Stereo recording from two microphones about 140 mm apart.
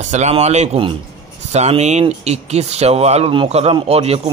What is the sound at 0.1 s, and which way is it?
A man's voice, 55° right (ahead or behind).